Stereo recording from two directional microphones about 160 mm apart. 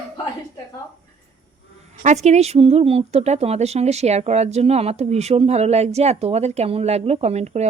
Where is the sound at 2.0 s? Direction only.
45° right (ahead or behind).